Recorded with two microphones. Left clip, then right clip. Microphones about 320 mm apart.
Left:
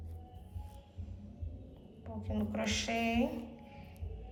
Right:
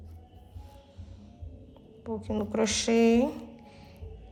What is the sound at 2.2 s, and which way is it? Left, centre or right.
A woman's voice, centre.